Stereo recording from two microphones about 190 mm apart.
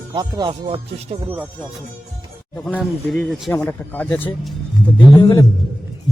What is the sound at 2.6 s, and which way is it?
A man's voice, centre (ahead or behind).